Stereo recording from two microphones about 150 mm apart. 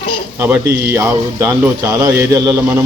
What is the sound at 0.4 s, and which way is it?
A man's voice, 15° right (ahead or behind).